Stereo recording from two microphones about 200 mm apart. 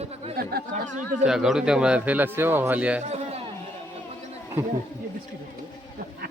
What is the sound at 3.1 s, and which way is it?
Chatter, 35° right (ahead or behind).